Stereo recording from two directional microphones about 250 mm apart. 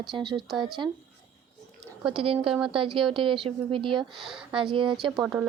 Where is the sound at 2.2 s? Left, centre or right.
Right.